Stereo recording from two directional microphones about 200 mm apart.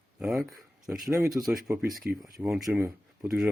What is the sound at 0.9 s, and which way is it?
Speech, 15° right (ahead or behind).